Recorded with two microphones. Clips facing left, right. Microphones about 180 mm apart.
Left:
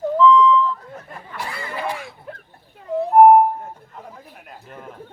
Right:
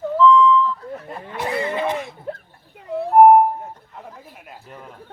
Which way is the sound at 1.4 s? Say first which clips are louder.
Right 7 dB; 20° right (ahead or behind).